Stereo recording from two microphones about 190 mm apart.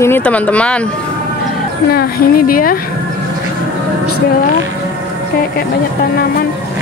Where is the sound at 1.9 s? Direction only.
55° left (ahead or behind).